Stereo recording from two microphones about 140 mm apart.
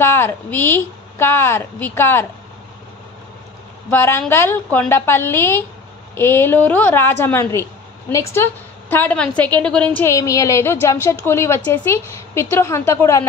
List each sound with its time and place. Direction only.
0.0 s a woman's voice: 15° left (ahead or behind)
3.9 s a woman's voice: 15° left (ahead or behind)
8.9 s a woman's voice: 10° left (ahead or behind)
10.0 s a woman's voice: 20° left (ahead or behind)